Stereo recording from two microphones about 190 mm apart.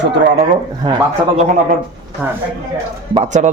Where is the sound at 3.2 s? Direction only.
40° right (ahead or behind).